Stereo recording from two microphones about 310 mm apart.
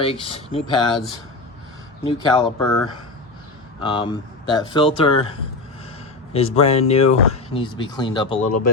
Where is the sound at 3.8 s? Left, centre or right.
Centre.